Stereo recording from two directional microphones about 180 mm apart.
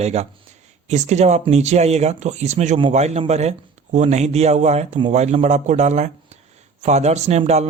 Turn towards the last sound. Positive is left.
turn(degrees=-35)  # may be behind; listen again after turning